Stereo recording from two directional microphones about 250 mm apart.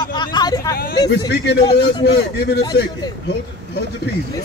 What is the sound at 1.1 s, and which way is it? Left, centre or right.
A man's voice, left.